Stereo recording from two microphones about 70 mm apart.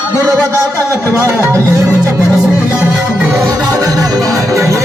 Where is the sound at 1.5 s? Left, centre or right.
Right.